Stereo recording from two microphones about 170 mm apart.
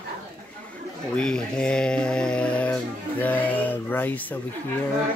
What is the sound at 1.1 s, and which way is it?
Speech, 5° left (ahead or behind).